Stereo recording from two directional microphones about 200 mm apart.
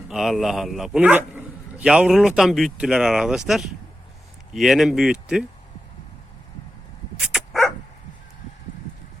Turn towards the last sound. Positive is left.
turn(degrees=0)  # may be behind; listen again after turning